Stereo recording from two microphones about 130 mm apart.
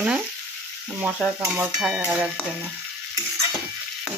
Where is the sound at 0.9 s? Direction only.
20° right (ahead or behind).